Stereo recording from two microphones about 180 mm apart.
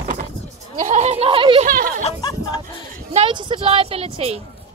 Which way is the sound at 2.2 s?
20° left (ahead or behind).